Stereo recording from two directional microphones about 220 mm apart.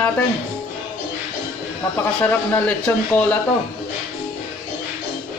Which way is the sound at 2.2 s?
10° left (ahead or behind).